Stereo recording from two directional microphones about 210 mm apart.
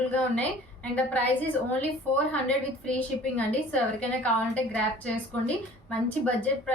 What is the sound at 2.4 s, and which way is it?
A woman's voice, 5° left (ahead or behind).